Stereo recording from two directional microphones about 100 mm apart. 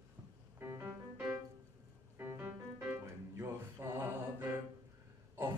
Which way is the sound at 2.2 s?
20° right (ahead or behind).